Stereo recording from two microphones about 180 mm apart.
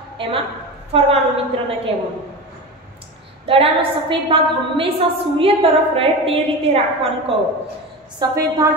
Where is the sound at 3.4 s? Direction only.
30° right (ahead or behind).